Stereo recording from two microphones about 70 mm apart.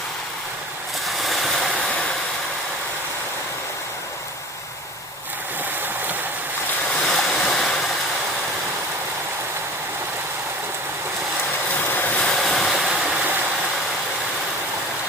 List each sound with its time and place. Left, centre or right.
1.0 s vehicle: centre
7.1 s waves: centre
11.8 s vehicle: left
12.2 s vehicle: centre